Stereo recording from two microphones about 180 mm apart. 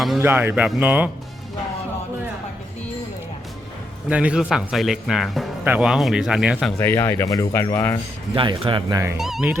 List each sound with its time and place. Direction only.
0.2 s speech: 10° right (ahead or behind)
4.1 s speech: 5° right (ahead or behind)
6.7 s speech: 10° left (ahead or behind)
8.3 s speech: 30° right (ahead or behind)
9.1 s speech: centre (ahead or behind)